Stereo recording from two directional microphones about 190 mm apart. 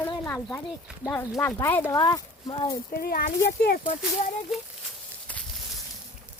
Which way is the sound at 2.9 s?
50° left (ahead or behind).